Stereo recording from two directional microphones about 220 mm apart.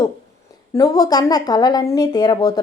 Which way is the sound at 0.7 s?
15° left (ahead or behind).